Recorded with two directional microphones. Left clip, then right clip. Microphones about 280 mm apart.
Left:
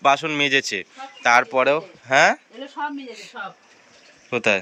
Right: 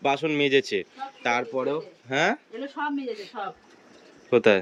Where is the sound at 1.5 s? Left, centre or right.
Left.